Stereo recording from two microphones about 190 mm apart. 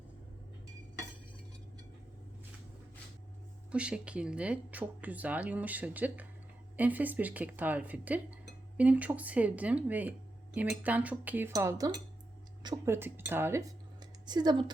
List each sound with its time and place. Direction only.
3.7 s speech: 5° right (ahead or behind); by 14.6 s 20° right (ahead or behind)